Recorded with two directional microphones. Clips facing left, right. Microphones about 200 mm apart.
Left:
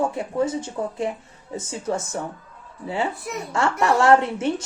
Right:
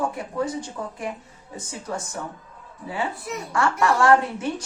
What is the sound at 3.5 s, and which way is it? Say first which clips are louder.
A woman's voice: left 1 dB; 25° left (ahead or behind).